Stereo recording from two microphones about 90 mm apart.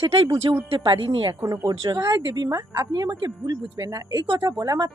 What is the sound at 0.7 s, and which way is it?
Speech, 65° right (ahead or behind).